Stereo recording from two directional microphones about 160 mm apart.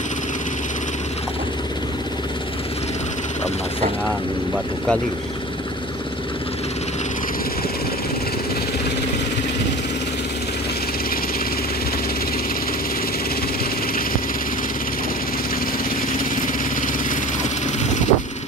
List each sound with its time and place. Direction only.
17.8 s vehicle: 50° left (ahead or behind)